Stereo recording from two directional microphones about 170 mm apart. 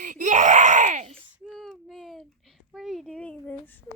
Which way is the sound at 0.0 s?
45° right (ahead or behind).